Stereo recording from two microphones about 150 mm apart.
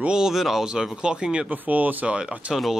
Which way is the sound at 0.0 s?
5° right (ahead or behind).